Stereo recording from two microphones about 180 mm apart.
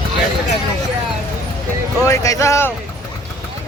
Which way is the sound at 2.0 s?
15° left (ahead or behind).